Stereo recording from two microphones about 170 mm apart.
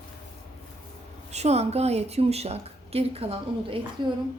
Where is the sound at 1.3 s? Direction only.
40° right (ahead or behind).